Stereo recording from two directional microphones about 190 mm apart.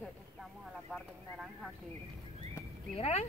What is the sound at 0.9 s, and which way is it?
Speech, centre (ahead or behind).